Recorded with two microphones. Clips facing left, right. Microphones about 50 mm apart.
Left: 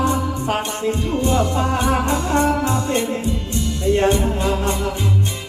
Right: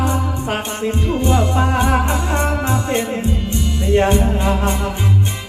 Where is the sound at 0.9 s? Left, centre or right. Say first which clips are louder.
Right 2 dB; right.